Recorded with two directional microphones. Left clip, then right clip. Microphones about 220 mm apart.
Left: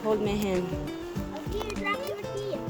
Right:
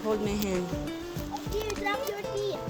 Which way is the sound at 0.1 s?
10° left (ahead or behind).